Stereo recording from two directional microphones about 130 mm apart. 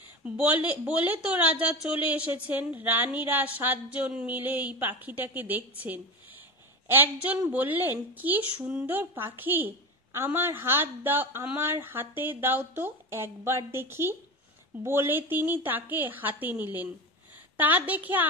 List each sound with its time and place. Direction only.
0.2 s a woman's voice: 10° right (ahead or behind)